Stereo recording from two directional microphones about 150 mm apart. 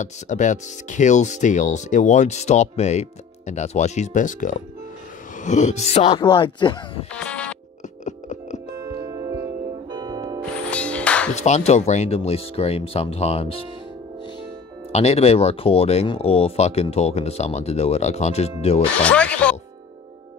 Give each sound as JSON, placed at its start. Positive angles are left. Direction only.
{"t": 0.0, "sound": "speech", "side_deg": 55}
{"t": 7.2, "sound": "music", "side_deg": 10}
{"t": 8.0, "sound": "music", "side_deg": 50}
{"t": 8.7, "sound": "music", "side_deg": -25}
{"t": 10.7, "sound": "music", "side_deg": 10}
{"t": 11.4, "sound": "speech", "side_deg": 50}
{"t": 14.9, "sound": "speech", "side_deg": 45}
{"t": 19.0, "sound": "music", "side_deg": 10}